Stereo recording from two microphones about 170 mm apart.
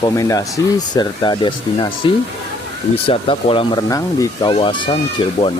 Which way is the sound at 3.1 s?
35° left (ahead or behind).